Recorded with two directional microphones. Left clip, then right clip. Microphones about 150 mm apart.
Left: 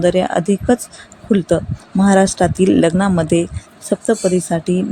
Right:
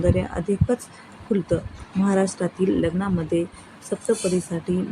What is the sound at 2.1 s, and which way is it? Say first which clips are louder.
Speech: left 10 dB; 90° left.